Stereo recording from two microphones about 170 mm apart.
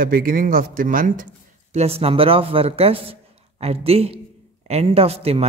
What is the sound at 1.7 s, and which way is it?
Speech, 35° right (ahead or behind).